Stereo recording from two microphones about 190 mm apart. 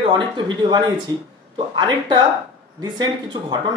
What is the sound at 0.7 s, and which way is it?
Speech, 25° right (ahead or behind).